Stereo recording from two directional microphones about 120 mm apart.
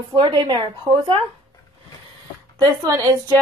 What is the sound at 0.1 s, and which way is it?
Speech, 45° right (ahead or behind).